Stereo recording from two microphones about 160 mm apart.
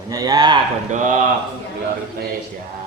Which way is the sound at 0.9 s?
50° right (ahead or behind).